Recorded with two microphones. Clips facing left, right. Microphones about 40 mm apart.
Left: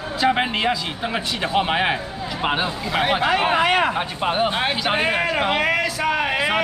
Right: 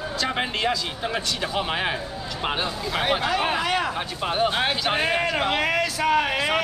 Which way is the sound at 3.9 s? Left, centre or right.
Centre.